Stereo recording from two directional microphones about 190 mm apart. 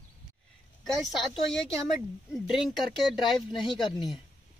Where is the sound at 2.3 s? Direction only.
Centre (ahead or behind).